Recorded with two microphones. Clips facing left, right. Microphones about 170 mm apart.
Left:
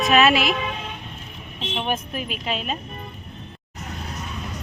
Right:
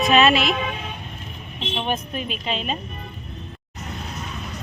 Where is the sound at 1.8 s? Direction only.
5° left (ahead or behind).